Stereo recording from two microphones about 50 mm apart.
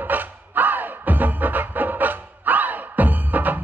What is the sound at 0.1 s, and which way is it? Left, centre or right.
Music, right.